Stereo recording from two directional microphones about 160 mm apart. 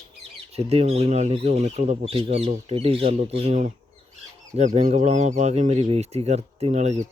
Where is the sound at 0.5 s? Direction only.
40° right (ahead or behind).